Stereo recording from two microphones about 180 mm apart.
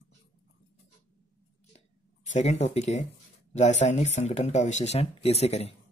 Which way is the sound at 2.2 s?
40° left (ahead or behind).